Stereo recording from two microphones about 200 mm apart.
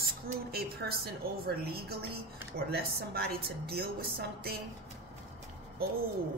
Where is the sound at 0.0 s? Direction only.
50° right (ahead or behind).